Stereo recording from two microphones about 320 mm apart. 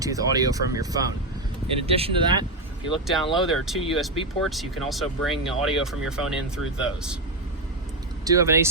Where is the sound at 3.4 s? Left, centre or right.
Centre.